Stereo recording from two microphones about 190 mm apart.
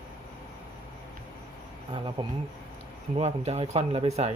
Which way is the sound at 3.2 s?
35° right (ahead or behind).